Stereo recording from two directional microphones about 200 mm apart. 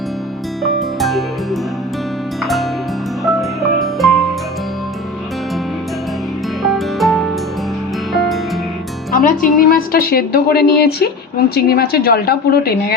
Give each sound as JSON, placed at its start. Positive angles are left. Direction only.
{"t": 0.6, "sound": "music", "side_deg": 0}
{"t": 2.4, "sound": "music", "side_deg": 0}
{"t": 3.8, "sound": "music", "side_deg": 0}
{"t": 6.6, "sound": "music", "side_deg": 0}
{"t": 9.1, "sound": "a woman's voice", "side_deg": 45}